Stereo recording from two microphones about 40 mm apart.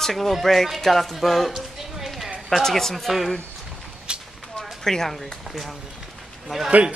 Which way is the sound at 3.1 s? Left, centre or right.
Centre.